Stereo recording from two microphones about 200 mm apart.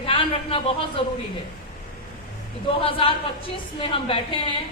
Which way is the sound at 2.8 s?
25° left (ahead or behind).